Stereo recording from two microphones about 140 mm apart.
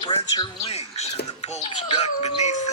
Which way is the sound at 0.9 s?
50° left (ahead or behind).